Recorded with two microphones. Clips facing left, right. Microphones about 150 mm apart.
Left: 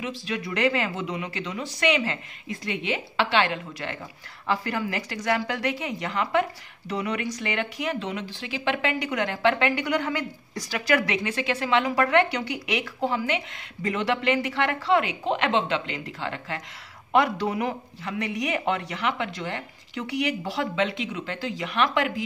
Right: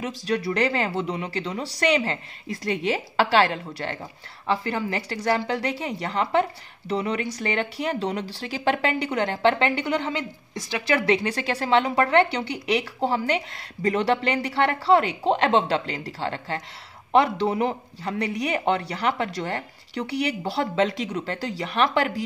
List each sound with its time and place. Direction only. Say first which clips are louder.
0.0 s speech: right 5 dB; 40° right (ahead or behind)